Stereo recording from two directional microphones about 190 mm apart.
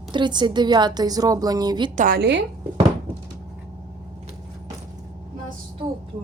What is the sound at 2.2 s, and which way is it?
Speech, 65° right (ahead or behind).